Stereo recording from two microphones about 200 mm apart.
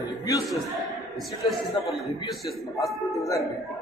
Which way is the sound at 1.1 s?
Centre (ahead or behind).